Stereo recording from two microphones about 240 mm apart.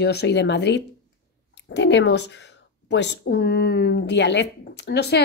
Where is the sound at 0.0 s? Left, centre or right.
Left.